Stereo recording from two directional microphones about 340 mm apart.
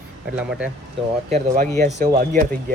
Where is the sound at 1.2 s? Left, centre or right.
Right.